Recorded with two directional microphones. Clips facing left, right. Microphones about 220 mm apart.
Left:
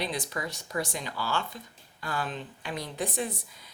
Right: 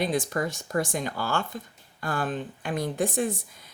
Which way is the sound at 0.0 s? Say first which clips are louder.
Right 7 dB; 50° right (ahead or behind).